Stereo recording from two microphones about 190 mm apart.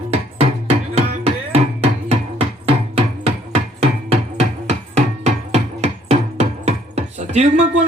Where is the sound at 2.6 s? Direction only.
30° right (ahead or behind).